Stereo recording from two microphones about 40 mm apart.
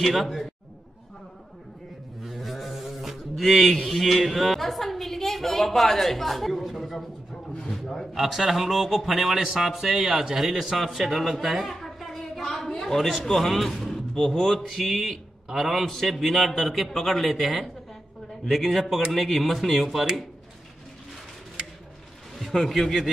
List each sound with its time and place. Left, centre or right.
0.0 s a man's voice: centre
2.2 s a sound: centre
8.1 s a man's voice: centre
11.4 s a sound: centre
12.6 s a man's voice: centre
14.7 s a man's voice: centre
22.4 s a man's voice: centre